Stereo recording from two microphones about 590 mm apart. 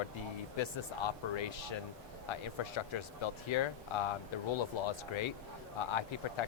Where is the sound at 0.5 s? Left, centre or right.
Left.